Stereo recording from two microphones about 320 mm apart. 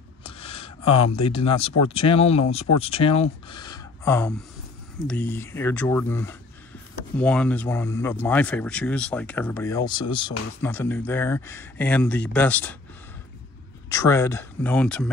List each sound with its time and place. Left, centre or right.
0.3 s a sound: centre
1.9 s speech: centre
13.8 s speech: centre